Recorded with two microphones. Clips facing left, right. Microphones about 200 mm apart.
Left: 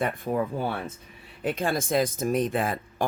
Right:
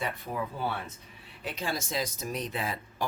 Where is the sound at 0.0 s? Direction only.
50° left (ahead or behind).